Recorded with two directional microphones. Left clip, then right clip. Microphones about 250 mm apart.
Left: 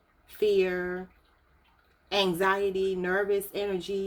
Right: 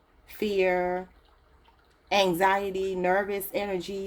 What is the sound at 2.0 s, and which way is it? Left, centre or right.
Speech, right.